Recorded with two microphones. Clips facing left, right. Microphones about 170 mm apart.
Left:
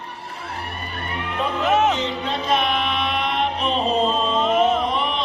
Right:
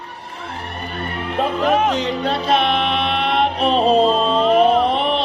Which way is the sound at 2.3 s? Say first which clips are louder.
Right 4 dB; 35° right (ahead or behind).